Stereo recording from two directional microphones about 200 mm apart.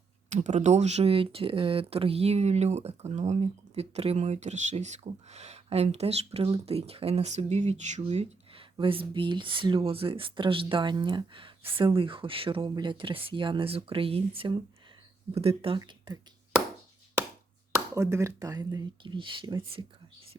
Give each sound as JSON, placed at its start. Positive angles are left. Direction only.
{"t": 0.3, "sound": "speech", "side_deg": -35}
{"t": 17.7, "sound": "speech", "side_deg": -15}